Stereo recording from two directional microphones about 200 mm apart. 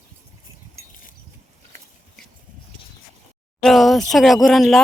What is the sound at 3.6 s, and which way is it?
Speech, centre (ahead or behind).